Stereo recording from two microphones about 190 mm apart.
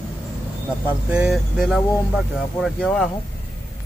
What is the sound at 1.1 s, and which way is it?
Speech, 5° right (ahead or behind).